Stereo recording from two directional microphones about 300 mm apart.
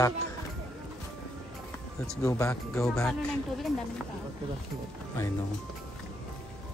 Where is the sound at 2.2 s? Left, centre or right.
Centre.